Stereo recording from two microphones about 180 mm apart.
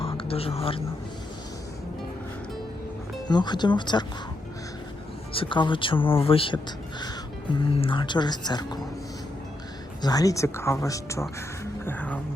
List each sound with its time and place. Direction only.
0.0 s speech: 30° left (ahead or behind)
3.2 s speech: 25° left (ahead or behind)
5.3 s speech: 30° left (ahead or behind)
10.0 s speech: 20° left (ahead or behind)